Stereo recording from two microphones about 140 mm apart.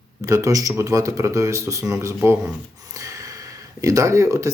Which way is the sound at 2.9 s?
25° right (ahead or behind).